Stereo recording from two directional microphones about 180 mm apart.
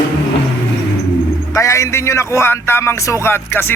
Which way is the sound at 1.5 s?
15° left (ahead or behind).